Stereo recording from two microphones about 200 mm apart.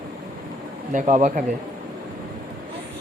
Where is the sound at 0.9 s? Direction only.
40° right (ahead or behind).